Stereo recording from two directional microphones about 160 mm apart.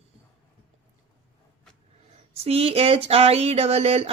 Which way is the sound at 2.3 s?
40° right (ahead or behind).